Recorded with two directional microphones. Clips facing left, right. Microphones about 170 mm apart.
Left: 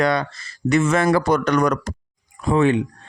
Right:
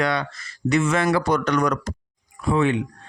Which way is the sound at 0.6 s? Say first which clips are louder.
Left 3 dB; 45° left (ahead or behind).